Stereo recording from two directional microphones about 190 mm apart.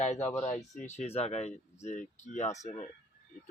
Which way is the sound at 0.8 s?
35° left (ahead or behind).